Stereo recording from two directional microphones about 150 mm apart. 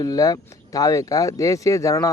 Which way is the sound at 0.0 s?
25° left (ahead or behind).